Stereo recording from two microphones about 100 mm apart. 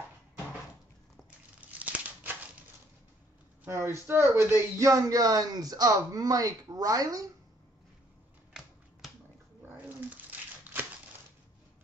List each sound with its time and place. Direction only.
1.7 s scissors: 15° right (ahead or behind)
3.6 s speech: 25° right (ahead or behind)
9.7 s a sound: 20° right (ahead or behind)